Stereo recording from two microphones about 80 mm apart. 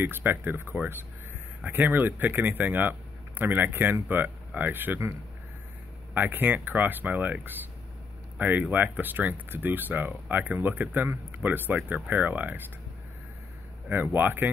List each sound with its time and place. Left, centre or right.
0.0 s speech: right
6.1 s speech: right
13.8 s speech: right